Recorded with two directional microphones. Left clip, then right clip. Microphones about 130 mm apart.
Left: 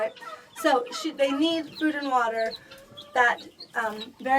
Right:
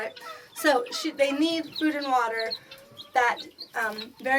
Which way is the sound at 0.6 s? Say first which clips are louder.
Even; 10° left (ahead or behind).